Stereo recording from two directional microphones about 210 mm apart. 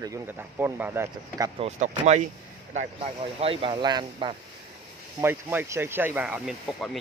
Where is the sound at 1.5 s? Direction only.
30° right (ahead or behind).